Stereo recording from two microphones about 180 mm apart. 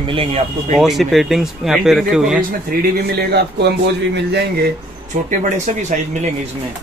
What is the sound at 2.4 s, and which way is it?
Speech, 50° right (ahead or behind).